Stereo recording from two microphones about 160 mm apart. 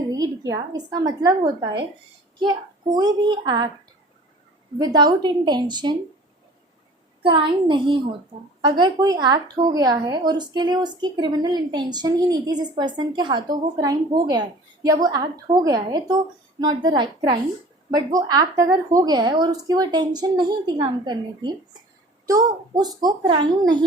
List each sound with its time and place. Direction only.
0.1 s a woman's voice: 20° right (ahead or behind)
4.8 s a woman's voice: 25° right (ahead or behind)
7.2 s a child's voice: 30° right (ahead or behind)